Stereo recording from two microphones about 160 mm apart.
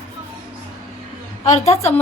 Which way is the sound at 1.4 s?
45° left (ahead or behind).